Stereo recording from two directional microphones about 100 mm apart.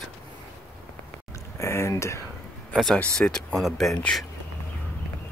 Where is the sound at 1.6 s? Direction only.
30° left (ahead or behind).